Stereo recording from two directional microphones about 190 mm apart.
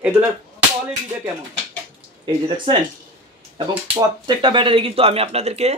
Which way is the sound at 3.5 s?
25° right (ahead or behind).